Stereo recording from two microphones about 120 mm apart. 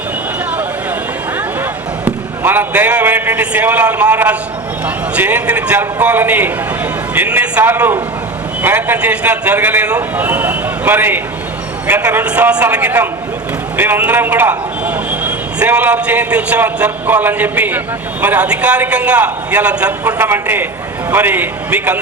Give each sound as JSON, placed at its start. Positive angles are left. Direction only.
{"t": 2.4, "sound": "a man's voice", "side_deg": -15}